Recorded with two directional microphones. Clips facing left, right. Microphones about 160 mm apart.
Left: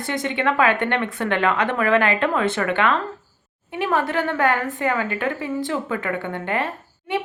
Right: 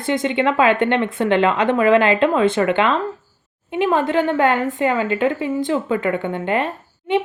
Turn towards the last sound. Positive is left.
turn(degrees=-20)  # may be behind; listen again after turning